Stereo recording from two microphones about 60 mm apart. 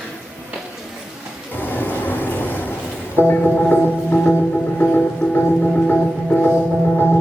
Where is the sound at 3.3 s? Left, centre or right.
Left.